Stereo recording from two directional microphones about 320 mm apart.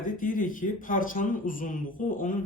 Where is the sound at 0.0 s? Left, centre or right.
Left.